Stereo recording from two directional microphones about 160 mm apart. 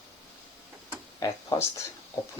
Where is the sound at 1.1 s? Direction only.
25° left (ahead or behind).